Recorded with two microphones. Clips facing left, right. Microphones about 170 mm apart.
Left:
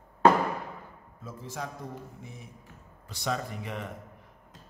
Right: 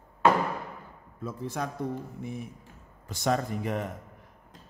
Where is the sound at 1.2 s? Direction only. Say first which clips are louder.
Right 6 dB; 60° right (ahead or behind).